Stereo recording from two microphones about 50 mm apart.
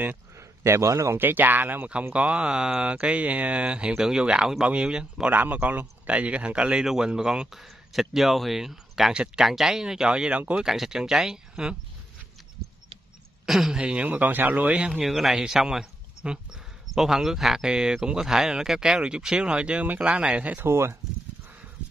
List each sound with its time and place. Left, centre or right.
0.4 s speech: right
1.1 s speech: right
2.1 s speech: right
5.3 s speech: right
6.8 s speech: centre
9.1 s speech: centre
9.4 s speech: centre
13.5 s speech: centre
13.7 s speech: centre
14.0 s speech: right
15.0 s speech: centre
16.2 s speech: right
16.9 s speech: centre; by 20.6 s right
20.6 s speech: right